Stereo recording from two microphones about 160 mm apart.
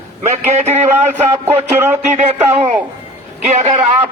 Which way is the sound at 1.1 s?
15° right (ahead or behind).